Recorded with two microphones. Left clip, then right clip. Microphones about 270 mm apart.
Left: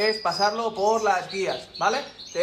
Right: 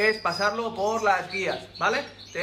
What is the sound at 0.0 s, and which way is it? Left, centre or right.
A man's voice, centre.